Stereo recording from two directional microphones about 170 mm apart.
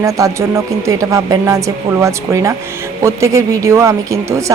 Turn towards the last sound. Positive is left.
turn(degrees=-20)  # may be behind; listen again after turning